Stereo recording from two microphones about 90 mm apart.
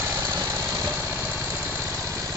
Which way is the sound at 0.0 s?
25° right (ahead or behind).